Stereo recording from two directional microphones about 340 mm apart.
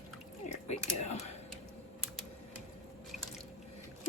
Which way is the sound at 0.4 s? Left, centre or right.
Centre.